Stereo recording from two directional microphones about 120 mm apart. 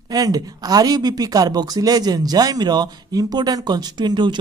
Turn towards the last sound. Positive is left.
turn(degrees=-40)  # may be behind; listen again after turning